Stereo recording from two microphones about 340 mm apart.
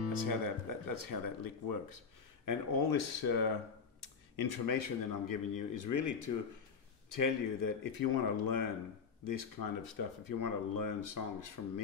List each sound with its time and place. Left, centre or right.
0.1 s speech: left
9.2 s speech: left